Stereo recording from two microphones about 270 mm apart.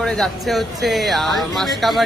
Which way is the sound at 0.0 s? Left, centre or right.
Centre.